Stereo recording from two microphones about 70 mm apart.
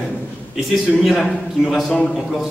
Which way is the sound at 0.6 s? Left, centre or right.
Centre.